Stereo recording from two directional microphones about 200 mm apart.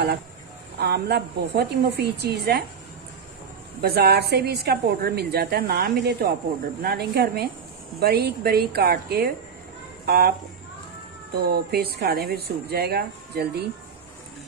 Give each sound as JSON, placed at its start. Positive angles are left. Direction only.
{"t": 0.7, "sound": "a woman's voice", "side_deg": -55}
{"t": 3.8, "sound": "a woman's voice", "side_deg": -55}
{"t": 11.3, "sound": "a woman's voice", "side_deg": -50}